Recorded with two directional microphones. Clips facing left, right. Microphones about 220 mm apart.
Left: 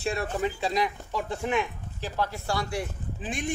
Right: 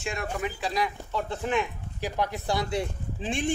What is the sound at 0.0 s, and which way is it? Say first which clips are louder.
Speech: left 3 dB; 35° left (ahead or behind).